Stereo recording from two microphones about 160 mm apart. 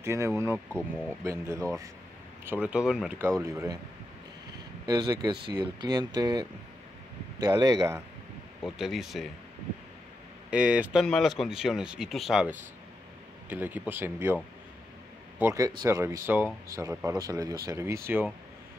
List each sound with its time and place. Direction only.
0.0 s speech: 15° right (ahead or behind)
3.2 s speech: 15° right (ahead or behind)
4.8 s speech: 25° right (ahead or behind)
8.6 s speech: centre (ahead or behind)
10.5 s speech: 5° right (ahead or behind)